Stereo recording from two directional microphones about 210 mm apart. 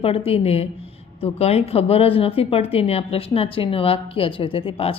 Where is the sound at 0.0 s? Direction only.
30° left (ahead or behind).